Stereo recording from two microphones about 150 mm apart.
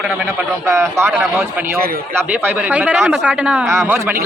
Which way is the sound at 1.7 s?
90° right.